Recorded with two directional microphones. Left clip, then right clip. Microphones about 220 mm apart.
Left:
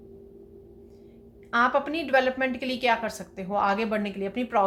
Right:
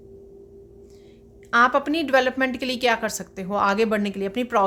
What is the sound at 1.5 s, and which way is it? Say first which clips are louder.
A woman's voice: right 5 dB; 45° right (ahead or behind).